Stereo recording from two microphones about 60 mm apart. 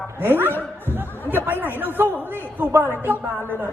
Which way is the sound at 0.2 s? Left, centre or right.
Right.